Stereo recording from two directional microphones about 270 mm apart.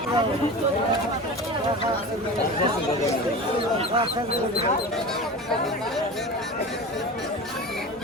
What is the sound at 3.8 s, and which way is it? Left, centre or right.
Speech, centre.